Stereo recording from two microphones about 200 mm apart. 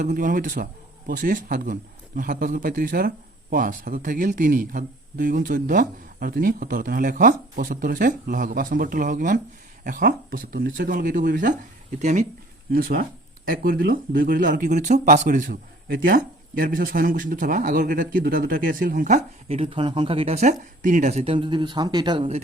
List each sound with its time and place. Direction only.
0.0 s speech: 40° right (ahead or behind)
12.7 s speech: 45° right (ahead or behind); by 22.4 s 25° right (ahead or behind)